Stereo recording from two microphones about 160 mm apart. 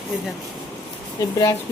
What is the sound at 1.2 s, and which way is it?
Speech, 20° left (ahead or behind).